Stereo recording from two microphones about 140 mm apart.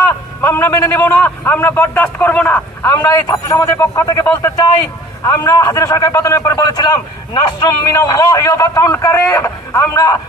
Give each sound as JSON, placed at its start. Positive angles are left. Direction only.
{"t": 0.4, "sound": "a man's voice", "side_deg": 15}